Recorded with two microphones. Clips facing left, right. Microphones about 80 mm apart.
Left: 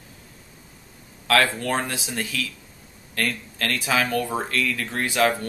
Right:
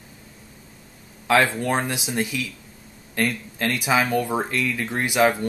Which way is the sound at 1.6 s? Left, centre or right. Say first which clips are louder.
Right 2 dB; centre.